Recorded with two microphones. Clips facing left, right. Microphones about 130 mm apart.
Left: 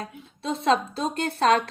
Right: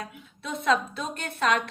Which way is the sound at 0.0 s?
30° left (ahead or behind).